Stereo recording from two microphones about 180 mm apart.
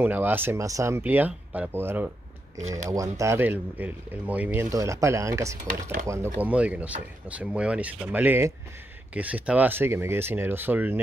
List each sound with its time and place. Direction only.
0.0 s speech: 10° right (ahead or behind)